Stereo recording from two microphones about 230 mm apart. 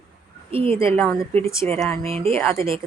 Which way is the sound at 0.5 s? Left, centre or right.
Right.